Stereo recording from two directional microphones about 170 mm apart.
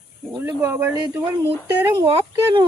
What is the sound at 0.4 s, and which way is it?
Speech, 15° right (ahead or behind).